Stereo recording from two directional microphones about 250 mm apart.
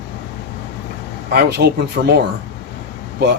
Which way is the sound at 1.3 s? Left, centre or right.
Right.